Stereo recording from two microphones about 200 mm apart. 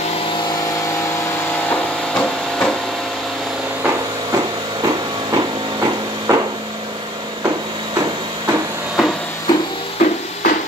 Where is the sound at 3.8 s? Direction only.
10° right (ahead or behind).